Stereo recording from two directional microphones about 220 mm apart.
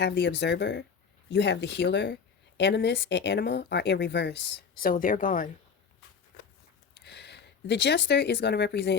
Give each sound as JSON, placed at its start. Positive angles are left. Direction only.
{"t": 0.0, "sound": "a woman's voice", "side_deg": 50}
{"t": 7.0, "sound": "speech", "side_deg": 50}